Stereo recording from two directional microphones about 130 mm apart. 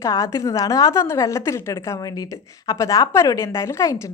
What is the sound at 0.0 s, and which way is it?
Speech, 25° left (ahead or behind).